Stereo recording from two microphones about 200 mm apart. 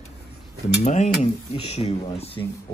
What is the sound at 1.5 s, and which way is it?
Speech, 30° left (ahead or behind).